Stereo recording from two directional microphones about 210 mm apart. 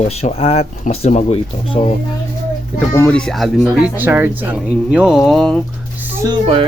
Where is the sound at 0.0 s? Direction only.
30° left (ahead or behind).